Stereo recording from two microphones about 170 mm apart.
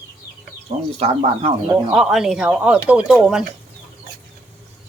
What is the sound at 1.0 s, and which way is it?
Speech, 35° right (ahead or behind).